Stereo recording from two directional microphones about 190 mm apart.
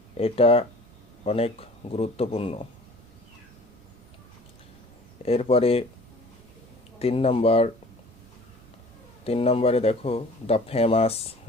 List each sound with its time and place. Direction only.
0.2 s speech: 30° left (ahead or behind)
5.2 s speech: 30° left (ahead or behind)
7.0 s speech: 30° left (ahead or behind)
9.2 s speech: 30° left (ahead or behind)